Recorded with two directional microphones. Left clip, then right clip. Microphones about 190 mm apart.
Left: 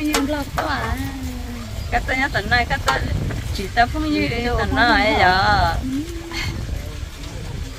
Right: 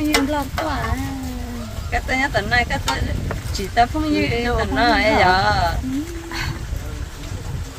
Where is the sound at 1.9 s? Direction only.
80° right.